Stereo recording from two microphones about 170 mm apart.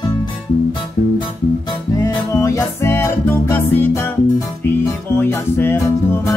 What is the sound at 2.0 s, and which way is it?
Music, 20° left (ahead or behind).